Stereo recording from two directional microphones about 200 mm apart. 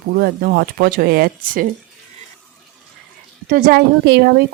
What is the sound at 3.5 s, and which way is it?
Speech, 45° right (ahead or behind).